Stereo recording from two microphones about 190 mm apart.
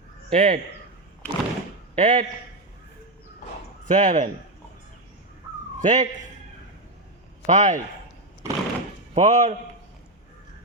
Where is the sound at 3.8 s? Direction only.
40° right (ahead or behind).